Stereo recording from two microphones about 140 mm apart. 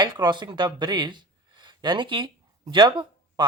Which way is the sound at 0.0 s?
30° right (ahead or behind).